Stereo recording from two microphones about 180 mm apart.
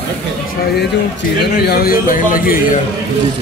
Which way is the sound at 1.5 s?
60° left (ahead or behind).